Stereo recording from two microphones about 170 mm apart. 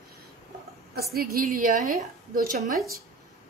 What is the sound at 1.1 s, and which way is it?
A woman's voice, 60° right (ahead or behind).